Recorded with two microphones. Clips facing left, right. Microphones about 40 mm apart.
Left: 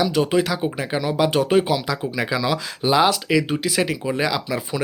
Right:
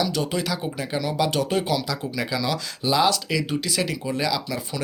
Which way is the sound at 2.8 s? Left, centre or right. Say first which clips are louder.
Left 3 dB; left.